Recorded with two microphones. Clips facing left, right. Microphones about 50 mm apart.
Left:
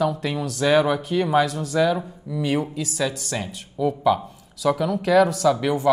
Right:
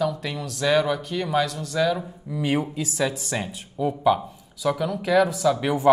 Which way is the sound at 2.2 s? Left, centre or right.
Right.